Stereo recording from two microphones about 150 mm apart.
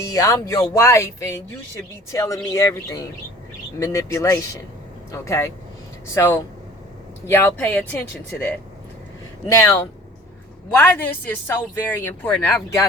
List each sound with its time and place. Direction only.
0.1 s speech: 20° left (ahead or behind)
9.5 s speech: 20° left (ahead or behind)